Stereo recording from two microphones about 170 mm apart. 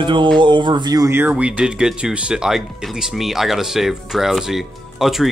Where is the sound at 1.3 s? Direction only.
5° right (ahead or behind).